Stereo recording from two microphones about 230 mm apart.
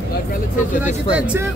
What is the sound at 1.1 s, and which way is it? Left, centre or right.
Speech, centre.